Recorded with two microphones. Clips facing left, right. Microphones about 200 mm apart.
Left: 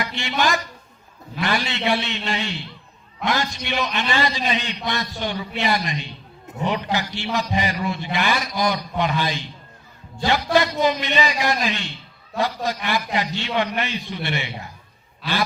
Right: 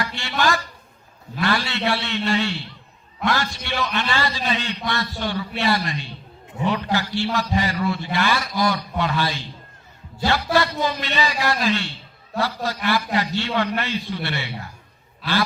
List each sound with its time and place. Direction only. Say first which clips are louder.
0.0 s a man's voice: even; 20° left (ahead or behind)